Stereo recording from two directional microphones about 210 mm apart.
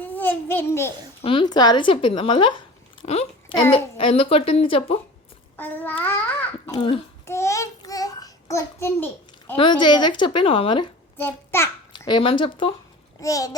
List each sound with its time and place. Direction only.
0.0 s babbling: 10° left (ahead or behind)
1.2 s a woman's voice: 25° left (ahead or behind)
5.5 s babbling: 10° left (ahead or behind)
6.7 s a woman's voice: 25° left (ahead or behind)
7.3 s a sound: 15° left (ahead or behind)
9.6 s a woman's voice: 20° left (ahead or behind)
11.2 s a child's voice: 10° left (ahead or behind)
11.9 s a woman's voice: 20° left (ahead or behind)